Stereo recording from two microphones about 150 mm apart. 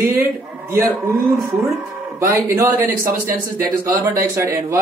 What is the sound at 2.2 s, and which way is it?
Speech, 20° right (ahead or behind).